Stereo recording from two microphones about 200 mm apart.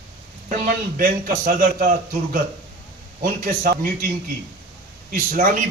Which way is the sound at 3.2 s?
45° right (ahead or behind).